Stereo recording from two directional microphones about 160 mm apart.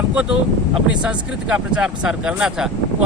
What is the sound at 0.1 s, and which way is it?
A man's voice, 5° right (ahead or behind).